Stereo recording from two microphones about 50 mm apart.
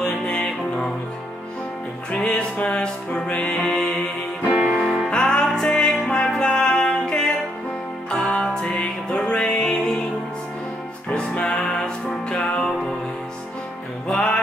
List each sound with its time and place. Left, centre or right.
0.0 s music: centre
2.0 s music: centre
4.6 s music: centre
5.1 s music: centre
11.1 s music: left
14.1 s music: left